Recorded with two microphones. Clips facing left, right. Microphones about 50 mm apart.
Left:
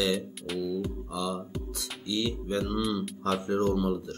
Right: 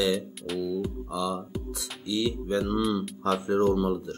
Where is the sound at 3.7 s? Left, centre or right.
Right.